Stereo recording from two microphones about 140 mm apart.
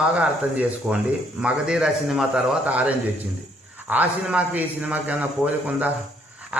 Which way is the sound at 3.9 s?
10° right (ahead or behind).